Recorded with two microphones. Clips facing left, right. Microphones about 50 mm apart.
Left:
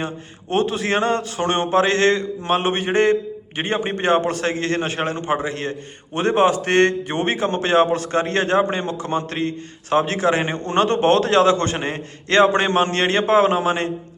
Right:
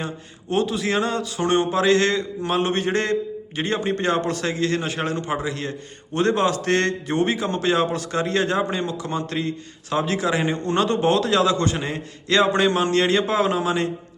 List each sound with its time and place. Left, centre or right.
0.5 s speech: left
6.1 s speech: left